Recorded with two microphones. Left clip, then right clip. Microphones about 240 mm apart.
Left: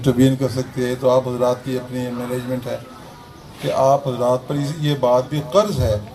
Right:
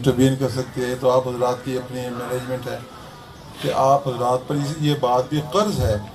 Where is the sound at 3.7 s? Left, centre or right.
Left.